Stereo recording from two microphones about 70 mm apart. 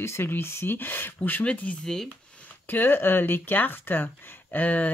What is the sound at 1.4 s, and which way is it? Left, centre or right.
Speech, centre.